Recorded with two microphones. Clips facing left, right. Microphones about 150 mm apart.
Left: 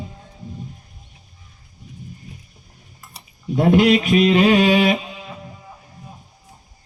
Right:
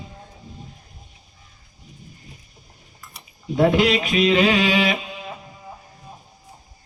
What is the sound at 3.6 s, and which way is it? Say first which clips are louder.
Speech: left 3 dB; 50° left (ahead or behind).